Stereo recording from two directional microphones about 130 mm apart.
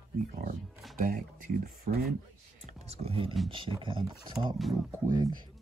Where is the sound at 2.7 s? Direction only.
50° right (ahead or behind).